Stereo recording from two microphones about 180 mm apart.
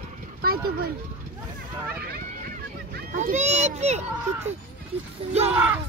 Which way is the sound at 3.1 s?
45° right (ahead or behind).